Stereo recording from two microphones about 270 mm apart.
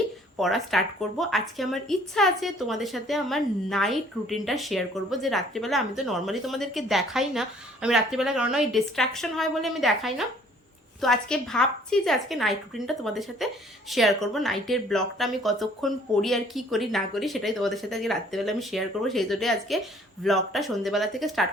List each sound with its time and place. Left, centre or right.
0.3 s a woman's voice: centre